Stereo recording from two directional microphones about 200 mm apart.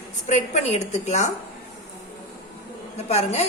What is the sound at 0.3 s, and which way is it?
A woman's voice, 35° left (ahead or behind).